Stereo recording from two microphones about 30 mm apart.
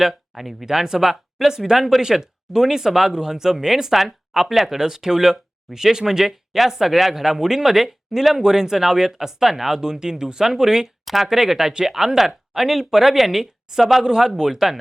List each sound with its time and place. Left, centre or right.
0.0 s speech: centre
1.7 s speech: centre
8.4 s speech: centre
11.0 s speech: centre
14.0 s speech: right